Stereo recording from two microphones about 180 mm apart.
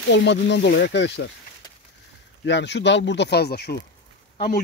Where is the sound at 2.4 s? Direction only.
75° left (ahead or behind).